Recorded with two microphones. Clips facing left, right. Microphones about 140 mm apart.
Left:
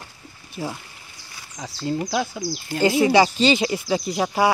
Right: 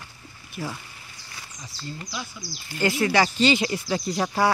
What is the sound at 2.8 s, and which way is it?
Speech, 20° left (ahead or behind).